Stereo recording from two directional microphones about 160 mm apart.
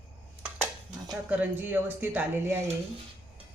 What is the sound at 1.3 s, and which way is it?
Speech, 10° right (ahead or behind).